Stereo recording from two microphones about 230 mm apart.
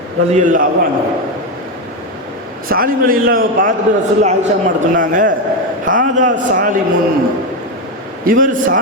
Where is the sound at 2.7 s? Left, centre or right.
Right.